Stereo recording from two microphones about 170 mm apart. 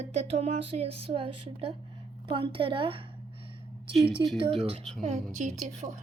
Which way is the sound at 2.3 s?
30° right (ahead or behind).